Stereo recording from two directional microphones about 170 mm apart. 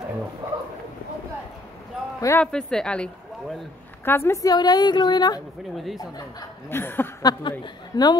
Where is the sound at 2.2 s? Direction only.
15° left (ahead or behind).